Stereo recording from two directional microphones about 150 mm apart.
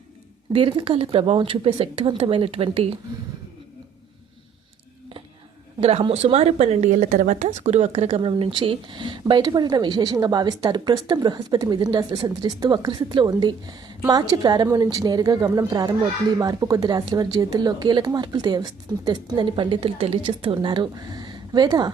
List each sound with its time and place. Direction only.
0.5 s speech: 35° right (ahead or behind)
5.8 s a woman's voice: 40° right (ahead or behind)